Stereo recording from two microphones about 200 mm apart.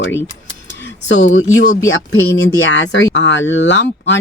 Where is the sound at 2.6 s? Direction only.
65° left (ahead or behind).